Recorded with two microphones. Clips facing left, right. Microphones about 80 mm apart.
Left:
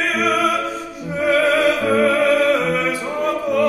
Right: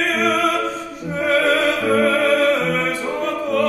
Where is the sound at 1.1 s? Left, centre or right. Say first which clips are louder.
Left 1 dB; centre.